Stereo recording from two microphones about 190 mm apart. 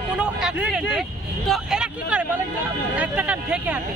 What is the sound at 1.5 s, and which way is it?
Speech, 5° right (ahead or behind).